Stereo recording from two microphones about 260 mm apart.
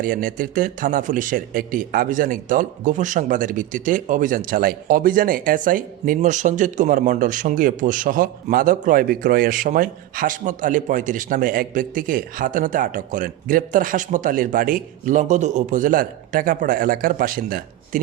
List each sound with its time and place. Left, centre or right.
0.0 s a man's voice: right